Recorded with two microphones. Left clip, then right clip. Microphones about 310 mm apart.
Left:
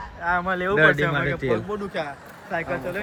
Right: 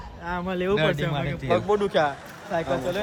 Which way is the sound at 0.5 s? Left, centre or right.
Right.